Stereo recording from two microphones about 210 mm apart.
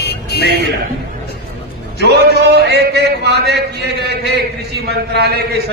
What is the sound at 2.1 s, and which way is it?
A man's voice, 50° right (ahead or behind).